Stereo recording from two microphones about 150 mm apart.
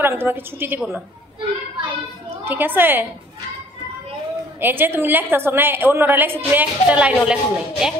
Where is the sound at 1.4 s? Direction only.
35° right (ahead or behind).